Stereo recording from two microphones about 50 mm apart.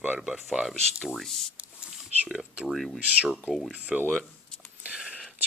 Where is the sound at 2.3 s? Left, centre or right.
Centre.